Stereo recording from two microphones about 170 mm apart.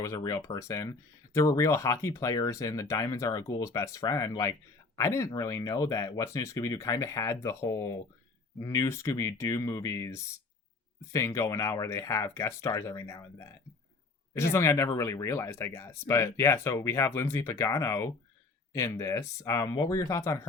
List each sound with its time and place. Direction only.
0.0 s speech: 20° left (ahead or behind)
14.5 s speech: 15° left (ahead or behind)